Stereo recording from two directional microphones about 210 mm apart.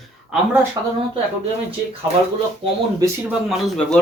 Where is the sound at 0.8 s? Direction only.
15° right (ahead or behind).